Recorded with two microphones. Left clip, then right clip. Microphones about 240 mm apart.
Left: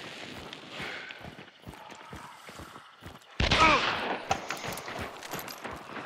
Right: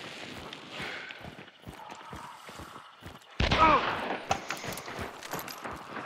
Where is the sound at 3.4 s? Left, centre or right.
Left.